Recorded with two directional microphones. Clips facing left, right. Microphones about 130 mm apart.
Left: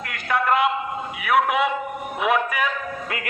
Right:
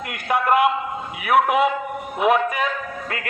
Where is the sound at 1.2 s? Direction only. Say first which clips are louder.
Right 3 dB; 45° right (ahead or behind).